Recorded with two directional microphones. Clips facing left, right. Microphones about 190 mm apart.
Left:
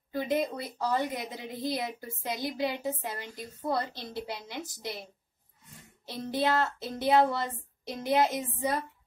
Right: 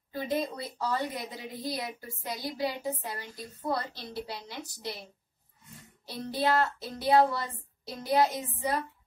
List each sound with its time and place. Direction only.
0.1 s a woman's voice: 20° left (ahead or behind)